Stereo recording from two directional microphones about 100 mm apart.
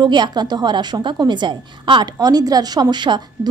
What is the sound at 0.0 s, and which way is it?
A woman's voice, 45° right (ahead or behind).